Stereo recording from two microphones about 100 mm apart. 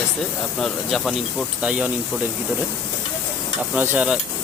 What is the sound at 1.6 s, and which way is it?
Speech, 15° right (ahead or behind).